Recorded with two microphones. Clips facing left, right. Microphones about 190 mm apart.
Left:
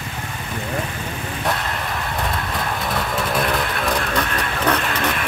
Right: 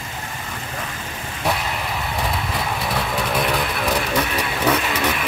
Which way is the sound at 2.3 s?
5° right (ahead or behind).